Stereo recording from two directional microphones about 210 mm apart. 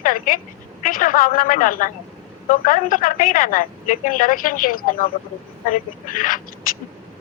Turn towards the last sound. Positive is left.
turn(degrees=40)  # may be behind; listen again after turning